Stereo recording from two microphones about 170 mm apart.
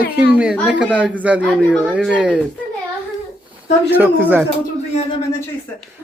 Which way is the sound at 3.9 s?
10° right (ahead or behind).